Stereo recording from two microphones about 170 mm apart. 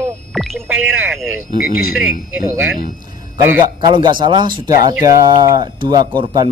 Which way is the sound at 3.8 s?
25° right (ahead or behind).